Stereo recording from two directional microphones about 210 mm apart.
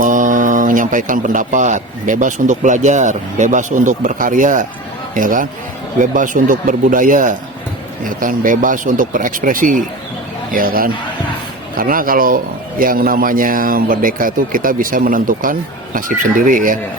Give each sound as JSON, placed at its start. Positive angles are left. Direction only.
{"t": 0.0, "sound": "a man's voice", "side_deg": -40}